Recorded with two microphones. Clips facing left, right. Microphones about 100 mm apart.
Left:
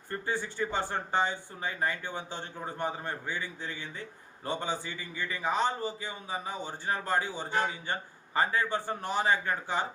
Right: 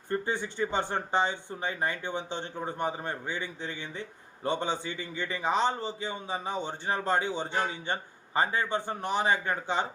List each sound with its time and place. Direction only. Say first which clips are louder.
0.1 s speech: right 3 dB; 20° right (ahead or behind)